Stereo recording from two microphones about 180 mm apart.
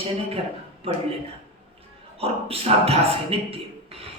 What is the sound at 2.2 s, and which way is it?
Speech, 35° right (ahead or behind).